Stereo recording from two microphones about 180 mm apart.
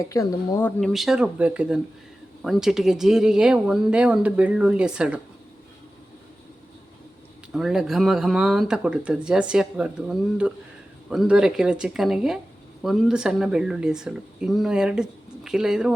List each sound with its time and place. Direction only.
0.1 s speech: 15° left (ahead or behind)
0.8 s speech: centre (ahead or behind)
7.5 s speech: centre (ahead or behind)